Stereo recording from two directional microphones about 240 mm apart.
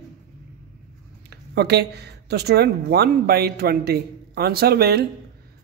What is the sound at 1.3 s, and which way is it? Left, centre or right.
Speech, right.